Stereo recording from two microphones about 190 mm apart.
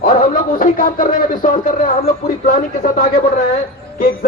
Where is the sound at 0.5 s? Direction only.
45° left (ahead or behind).